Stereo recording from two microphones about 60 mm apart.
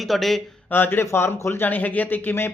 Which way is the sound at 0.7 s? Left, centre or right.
Left.